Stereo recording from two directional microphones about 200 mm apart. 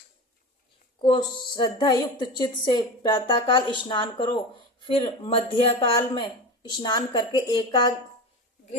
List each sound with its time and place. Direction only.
0.9 s a woman's voice: 25° left (ahead or behind)